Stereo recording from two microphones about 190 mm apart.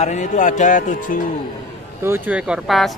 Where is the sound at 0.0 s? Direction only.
40° left (ahead or behind).